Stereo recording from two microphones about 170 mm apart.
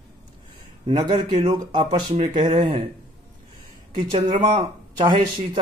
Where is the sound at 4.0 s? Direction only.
30° right (ahead or behind).